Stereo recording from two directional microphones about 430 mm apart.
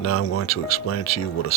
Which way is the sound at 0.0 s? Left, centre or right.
Left.